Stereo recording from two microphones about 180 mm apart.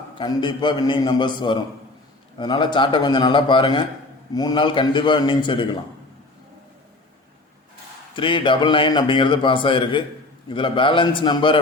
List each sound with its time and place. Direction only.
0.2 s a man's voice: 25° left (ahead or behind)
8.1 s a man's voice: 25° left (ahead or behind)